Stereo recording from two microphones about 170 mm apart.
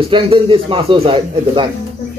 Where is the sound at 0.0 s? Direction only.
30° right (ahead or behind).